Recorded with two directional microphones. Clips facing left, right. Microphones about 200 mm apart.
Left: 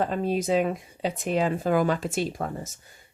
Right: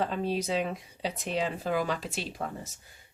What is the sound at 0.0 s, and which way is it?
Speech, 50° left (ahead or behind).